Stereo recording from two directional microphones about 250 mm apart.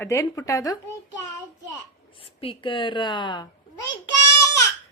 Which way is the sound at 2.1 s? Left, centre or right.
Left.